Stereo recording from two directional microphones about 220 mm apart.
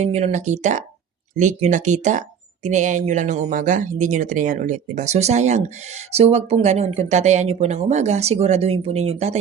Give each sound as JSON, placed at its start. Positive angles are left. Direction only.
{"t": 0.0, "sound": "speech", "side_deg": -30}